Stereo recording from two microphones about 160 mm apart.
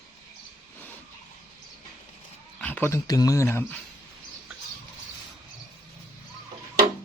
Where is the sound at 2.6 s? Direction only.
10° left (ahead or behind).